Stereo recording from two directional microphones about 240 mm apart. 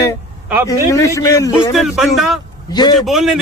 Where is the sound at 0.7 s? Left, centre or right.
Centre.